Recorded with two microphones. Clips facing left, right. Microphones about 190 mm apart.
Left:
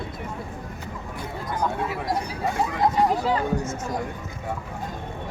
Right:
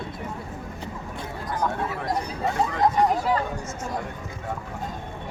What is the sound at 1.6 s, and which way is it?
Chatter, 10° left (ahead or behind).